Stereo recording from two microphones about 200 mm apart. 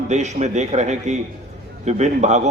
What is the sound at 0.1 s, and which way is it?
A man's voice, 35° right (ahead or behind).